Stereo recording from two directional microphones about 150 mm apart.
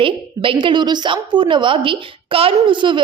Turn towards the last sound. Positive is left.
turn(degrees=-30)  # may be behind; listen again after turning